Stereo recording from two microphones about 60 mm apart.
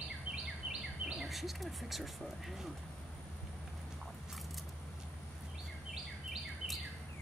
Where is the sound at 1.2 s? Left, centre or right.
Centre.